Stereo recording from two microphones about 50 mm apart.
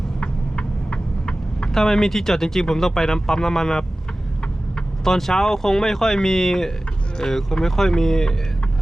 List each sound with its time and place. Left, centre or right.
0.2 s vehicle: centre
1.7 s speech: centre
5.0 s speech: centre